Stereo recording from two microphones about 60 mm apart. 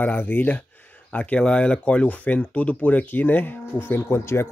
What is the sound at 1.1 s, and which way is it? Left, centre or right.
Speech, left.